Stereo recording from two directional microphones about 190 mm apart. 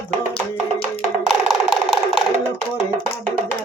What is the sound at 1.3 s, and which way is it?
Music, centre (ahead or behind).